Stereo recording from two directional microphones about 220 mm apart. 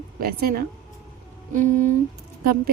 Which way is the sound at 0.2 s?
45° right (ahead or behind).